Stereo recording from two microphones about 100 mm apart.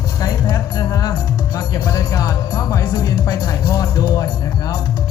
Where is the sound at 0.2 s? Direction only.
40° left (ahead or behind).